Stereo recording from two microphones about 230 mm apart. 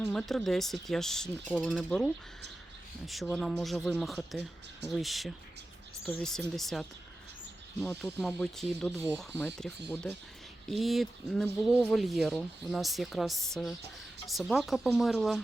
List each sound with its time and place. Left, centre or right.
0.0 s speech: centre
3.1 s speech: centre